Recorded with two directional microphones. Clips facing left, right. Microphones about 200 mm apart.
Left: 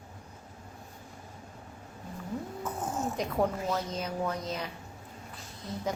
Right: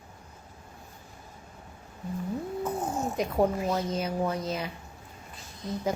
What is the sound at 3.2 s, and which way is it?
A woman's voice, 10° right (ahead or behind).